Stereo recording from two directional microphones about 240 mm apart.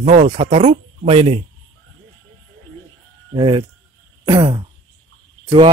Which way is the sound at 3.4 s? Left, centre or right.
Centre.